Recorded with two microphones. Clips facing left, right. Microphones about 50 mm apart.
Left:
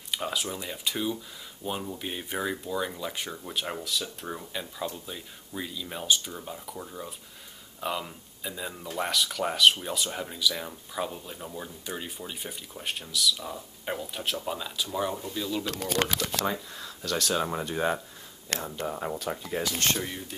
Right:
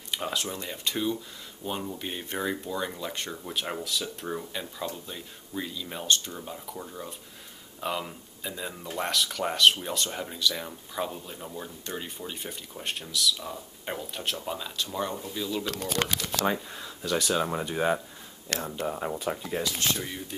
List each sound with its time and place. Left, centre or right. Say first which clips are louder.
0.1 s speech: even; centre
15.7 s speech: left 1 dB; centre
16.7 s speech: right 2 dB; centre
19.6 s speech: left 3 dB; left
20.0 s speech: left 1 dB; centre